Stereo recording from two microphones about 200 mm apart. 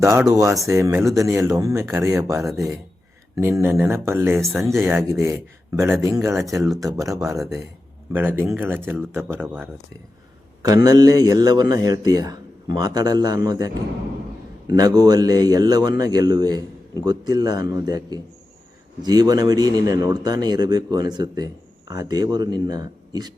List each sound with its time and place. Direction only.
0.0 s speech: 15° right (ahead or behind)
10.8 s speech: 20° right (ahead or behind)
14.7 s speech: 20° right (ahead or behind)